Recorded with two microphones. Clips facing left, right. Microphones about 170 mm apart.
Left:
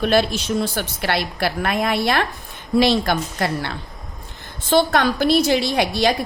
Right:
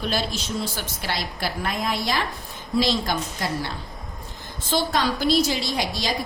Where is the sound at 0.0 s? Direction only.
65° left (ahead or behind).